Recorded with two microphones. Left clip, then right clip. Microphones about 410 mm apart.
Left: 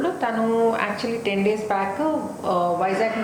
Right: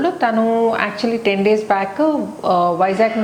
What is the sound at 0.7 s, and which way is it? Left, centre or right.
A woman's voice, right.